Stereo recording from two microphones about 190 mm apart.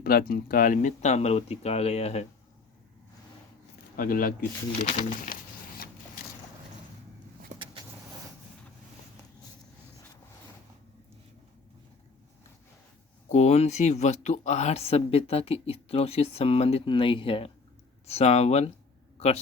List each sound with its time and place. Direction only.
0.0 s speech: 50° left (ahead or behind); by 2.2 s 35° left (ahead or behind)
3.9 s speech: 50° left (ahead or behind)
4.9 s a sound: 35° left (ahead or behind)
7.5 s vehicle: 35° right (ahead or behind)
13.2 s speech: 35° left (ahead or behind)
19.1 s a sound: 35° left (ahead or behind)